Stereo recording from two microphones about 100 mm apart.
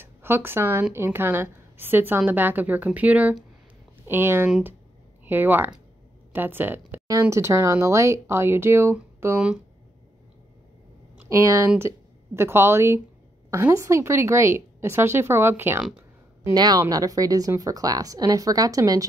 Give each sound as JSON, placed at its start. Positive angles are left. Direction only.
{"t": 0.0, "sound": "a woman's voice", "side_deg": -25}
{"t": 7.1, "sound": "a woman's voice", "side_deg": -30}
{"t": 11.2, "sound": "a woman's voice", "side_deg": -30}
{"t": 16.5, "sound": "a woman's voice", "side_deg": -45}